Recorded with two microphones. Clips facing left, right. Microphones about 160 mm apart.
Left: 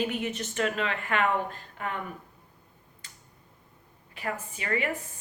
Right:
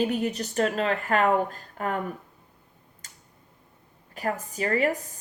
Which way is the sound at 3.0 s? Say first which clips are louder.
Even; 45° right (ahead or behind).